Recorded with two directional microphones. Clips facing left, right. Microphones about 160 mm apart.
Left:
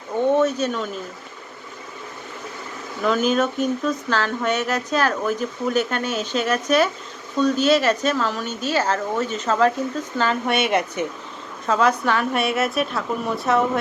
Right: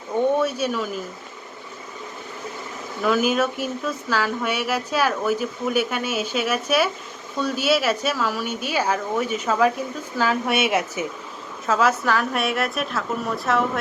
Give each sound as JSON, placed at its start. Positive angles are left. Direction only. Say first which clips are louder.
{"t": 0.3, "sound": "speech", "louder": "left 3 dB", "side_deg": -10}
{"t": 3.0, "sound": "a woman's voice", "louder": "left 1 dB", "side_deg": -5}